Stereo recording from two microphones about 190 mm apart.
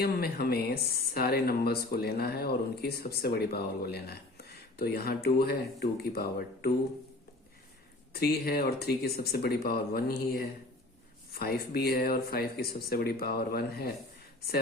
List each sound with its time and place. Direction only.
0.0 s speech: 55° left (ahead or behind)
8.1 s speech: 55° left (ahead or behind)